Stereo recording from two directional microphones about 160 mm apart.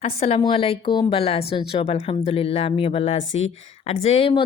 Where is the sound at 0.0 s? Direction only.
40° left (ahead or behind).